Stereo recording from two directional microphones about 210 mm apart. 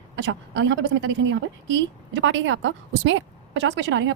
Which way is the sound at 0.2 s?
60° right (ahead or behind).